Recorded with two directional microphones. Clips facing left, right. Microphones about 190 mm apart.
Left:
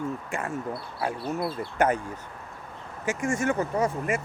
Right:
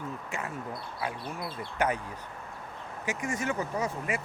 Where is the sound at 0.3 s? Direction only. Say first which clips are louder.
Left 5 dB; 50° left (ahead or behind).